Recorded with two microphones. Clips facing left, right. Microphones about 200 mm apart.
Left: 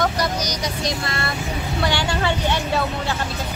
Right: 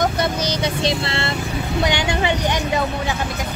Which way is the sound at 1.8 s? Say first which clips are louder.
Right 2 dB; 20° right (ahead or behind).